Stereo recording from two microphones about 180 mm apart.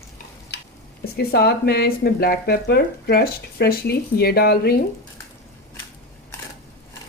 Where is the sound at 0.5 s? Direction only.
65° left (ahead or behind).